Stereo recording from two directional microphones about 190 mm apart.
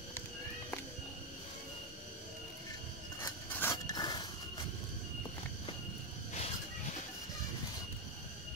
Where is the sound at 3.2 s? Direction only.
15° left (ahead or behind).